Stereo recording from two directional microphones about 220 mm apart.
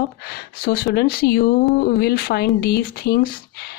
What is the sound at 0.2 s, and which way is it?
Speech, 45° left (ahead or behind).